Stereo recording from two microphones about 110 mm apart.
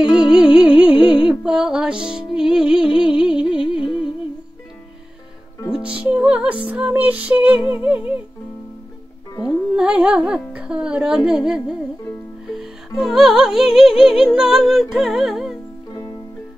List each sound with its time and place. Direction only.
0.0 s music: 10° right (ahead or behind)
3.1 s humming: 10° right (ahead or behind)
5.7 s music: 10° right (ahead or behind)
9.3 s music: 25° left (ahead or behind)
9.8 s speech: 10° right (ahead or behind)
12.5 s music: 5° right (ahead or behind)